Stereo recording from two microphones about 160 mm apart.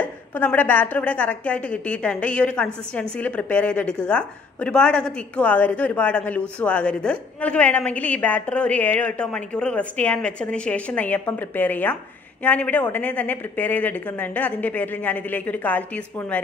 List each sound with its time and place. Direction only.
0.0 s a woman's voice: 10° left (ahead or behind)